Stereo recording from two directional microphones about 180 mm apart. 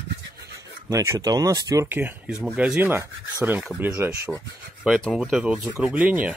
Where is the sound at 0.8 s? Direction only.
20° right (ahead or behind).